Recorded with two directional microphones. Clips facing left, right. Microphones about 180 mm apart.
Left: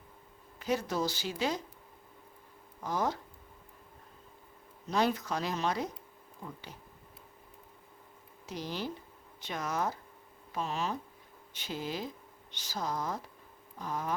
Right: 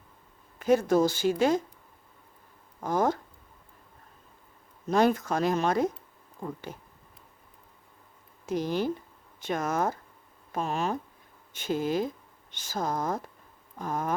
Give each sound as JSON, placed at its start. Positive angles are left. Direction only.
{"t": 0.6, "sound": "speech", "side_deg": -50}
{"t": 2.8, "sound": "speech", "side_deg": -50}
{"t": 4.9, "sound": "speech", "side_deg": -50}
{"t": 8.4, "sound": "speech", "side_deg": -50}